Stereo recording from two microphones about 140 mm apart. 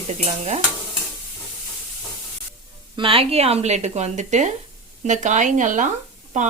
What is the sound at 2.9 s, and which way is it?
Speech, 40° right (ahead or behind).